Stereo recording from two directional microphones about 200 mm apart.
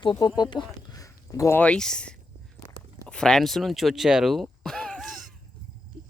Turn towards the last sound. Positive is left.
turn(degrees=0)  # may be behind; listen again after turning